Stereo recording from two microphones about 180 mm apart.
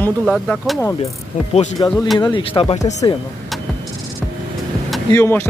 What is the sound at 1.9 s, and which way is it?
Speech, centre (ahead or behind).